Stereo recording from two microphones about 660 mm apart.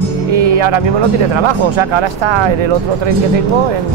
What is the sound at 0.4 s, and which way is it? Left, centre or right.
Speech, right.